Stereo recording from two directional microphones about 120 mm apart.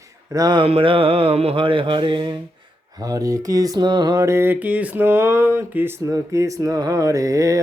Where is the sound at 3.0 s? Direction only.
30° right (ahead or behind).